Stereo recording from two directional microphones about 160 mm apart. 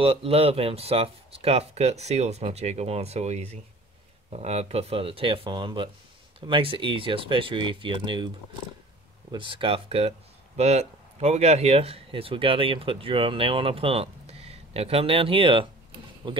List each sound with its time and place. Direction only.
0.0 s speech: 35° right (ahead or behind)
9.3 s speech: 30° right (ahead or behind)